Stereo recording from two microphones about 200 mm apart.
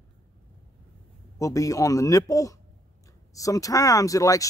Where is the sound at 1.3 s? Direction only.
15° left (ahead or behind).